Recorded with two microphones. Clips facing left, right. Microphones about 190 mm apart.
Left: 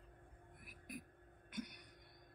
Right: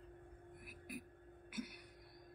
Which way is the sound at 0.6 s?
5° right (ahead or behind).